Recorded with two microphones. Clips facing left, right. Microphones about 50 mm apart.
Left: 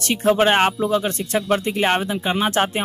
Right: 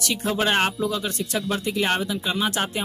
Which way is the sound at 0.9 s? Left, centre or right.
Left.